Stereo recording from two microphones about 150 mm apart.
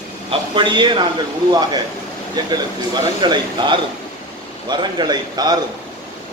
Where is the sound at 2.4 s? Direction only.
25° right (ahead or behind).